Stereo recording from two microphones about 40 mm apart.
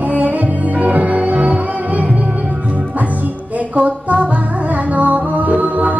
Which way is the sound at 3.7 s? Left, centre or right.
Right.